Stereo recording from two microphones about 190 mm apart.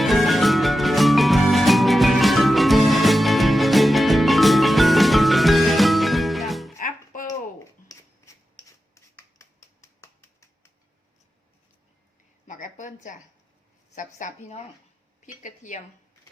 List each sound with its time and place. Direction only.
0.0 s music: centre (ahead or behind)
6.7 s music: 45° left (ahead or behind)
7.3 s a sound: 20° left (ahead or behind)
8.5 s finger snapping: 15° left (ahead or behind)
12.5 s a sound: 45° left (ahead or behind)
13.9 s speech: 40° left (ahead or behind)